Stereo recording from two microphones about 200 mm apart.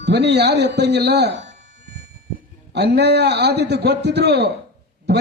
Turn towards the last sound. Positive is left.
turn(degrees=-55)  # may be behind; listen again after turning